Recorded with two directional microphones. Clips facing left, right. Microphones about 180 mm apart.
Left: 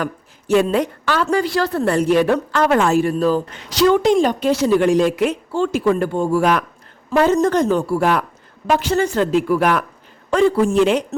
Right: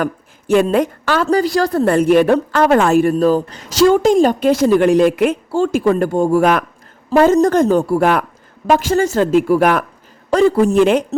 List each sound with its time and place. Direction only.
0.0 s a woman's voice: 50° right (ahead or behind)
2.3 s speech: 35° right (ahead or behind)
2.8 s a woman's voice: 55° right (ahead or behind)
5.5 s a woman's voice: 45° right (ahead or behind)
7.1 s a woman's voice: 40° right (ahead or behind)